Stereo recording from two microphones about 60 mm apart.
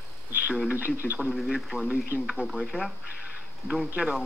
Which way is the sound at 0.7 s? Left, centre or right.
Right.